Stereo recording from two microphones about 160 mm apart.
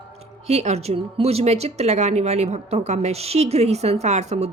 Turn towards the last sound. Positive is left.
turn(degrees=-45)  # may be behind; listen again after turning